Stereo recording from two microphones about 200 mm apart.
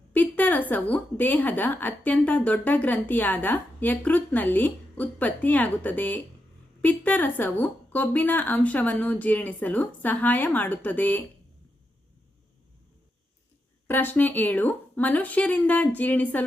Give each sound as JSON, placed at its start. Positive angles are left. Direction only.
{"t": 0.1, "sound": "a woman's voice", "side_deg": 10}
{"t": 13.8, "sound": "a woman's voice", "side_deg": 10}